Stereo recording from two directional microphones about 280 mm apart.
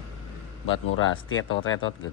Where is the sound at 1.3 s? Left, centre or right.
Left.